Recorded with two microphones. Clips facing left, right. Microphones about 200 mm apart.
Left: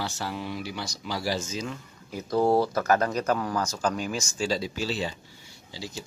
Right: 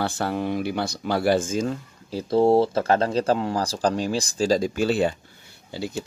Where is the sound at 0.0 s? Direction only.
55° right (ahead or behind).